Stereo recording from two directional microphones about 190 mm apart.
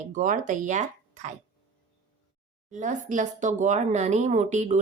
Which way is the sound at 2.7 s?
40° right (ahead or behind).